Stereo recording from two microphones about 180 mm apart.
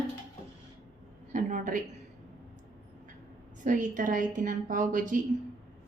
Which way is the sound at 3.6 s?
45° right (ahead or behind).